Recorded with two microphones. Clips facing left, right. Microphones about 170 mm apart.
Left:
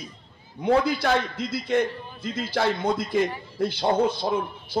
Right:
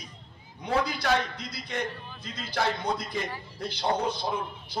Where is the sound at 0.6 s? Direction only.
50° left (ahead or behind).